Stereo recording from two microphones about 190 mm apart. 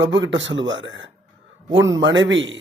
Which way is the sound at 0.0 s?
75° right (ahead or behind).